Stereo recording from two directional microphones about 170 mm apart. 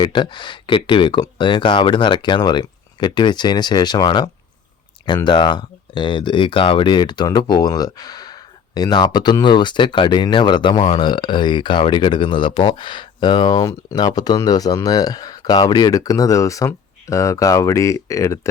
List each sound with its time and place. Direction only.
0.0 s speech: 30° left (ahead or behind)